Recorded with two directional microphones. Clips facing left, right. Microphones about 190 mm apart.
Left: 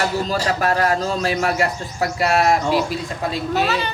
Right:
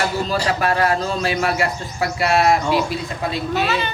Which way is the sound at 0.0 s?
40° left (ahead or behind).